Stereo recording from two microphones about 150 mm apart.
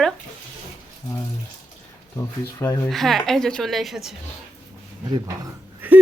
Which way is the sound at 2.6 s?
20° left (ahead or behind).